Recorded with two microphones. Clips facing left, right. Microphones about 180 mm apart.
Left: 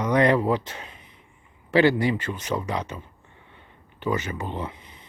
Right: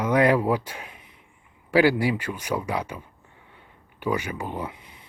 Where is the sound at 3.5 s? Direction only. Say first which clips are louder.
Left 1 dB; 10° right (ahead or behind).